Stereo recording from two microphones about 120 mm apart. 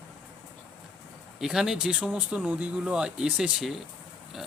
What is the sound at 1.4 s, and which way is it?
Speech, 5° right (ahead or behind).